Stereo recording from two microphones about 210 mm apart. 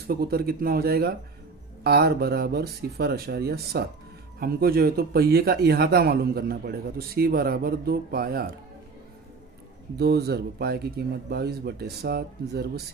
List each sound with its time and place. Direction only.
0.0 s speech: 45° right (ahead or behind)
9.9 s speech: 50° right (ahead or behind)